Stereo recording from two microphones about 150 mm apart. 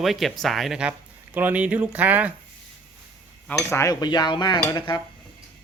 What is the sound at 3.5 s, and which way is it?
Cutlery, 20° left (ahead or behind).